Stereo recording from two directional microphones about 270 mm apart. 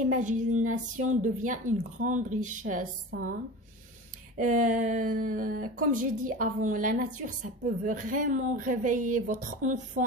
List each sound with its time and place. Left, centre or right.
0.1 s speech: right
4.4 s speech: right